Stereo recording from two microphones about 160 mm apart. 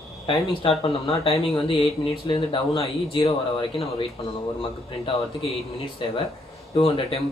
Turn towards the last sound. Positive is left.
turn(degrees=35)  # may be behind; listen again after turning